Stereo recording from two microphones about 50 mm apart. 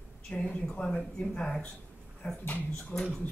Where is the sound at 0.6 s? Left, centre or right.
Centre.